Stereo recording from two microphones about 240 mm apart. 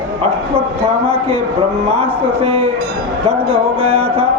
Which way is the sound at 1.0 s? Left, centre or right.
Right.